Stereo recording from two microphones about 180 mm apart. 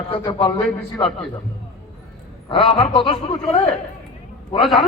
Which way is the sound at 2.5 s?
30° left (ahead or behind).